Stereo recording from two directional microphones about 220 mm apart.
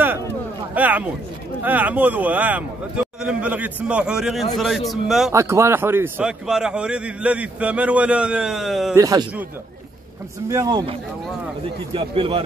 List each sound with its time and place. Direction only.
0.7 s a man's voice: 5° right (ahead or behind)
5.3 s a man's voice: 15° right (ahead or behind)
8.9 s speech: 15° right (ahead or behind)
10.5 s a man's voice: 15° right (ahead or behind)